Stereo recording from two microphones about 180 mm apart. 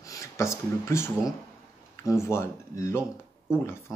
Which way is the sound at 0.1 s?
15° left (ahead or behind).